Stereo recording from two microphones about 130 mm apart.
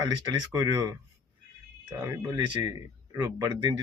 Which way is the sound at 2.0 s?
30° right (ahead or behind).